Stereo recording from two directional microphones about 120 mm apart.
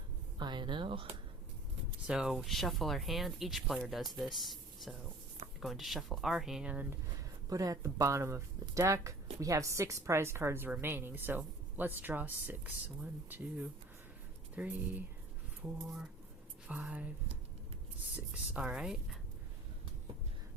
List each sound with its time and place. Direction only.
0.3 s speech: 40° right (ahead or behind)
2.0 s speech: 5° right (ahead or behind)
7.5 s a woman's voice: 30° right (ahead or behind); by 17.1 s 10° right (ahead or behind)
18.5 s speech: 10° right (ahead or behind)